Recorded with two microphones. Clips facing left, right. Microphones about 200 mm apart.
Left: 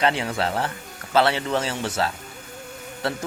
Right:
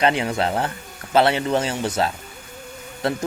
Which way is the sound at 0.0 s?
15° right (ahead or behind).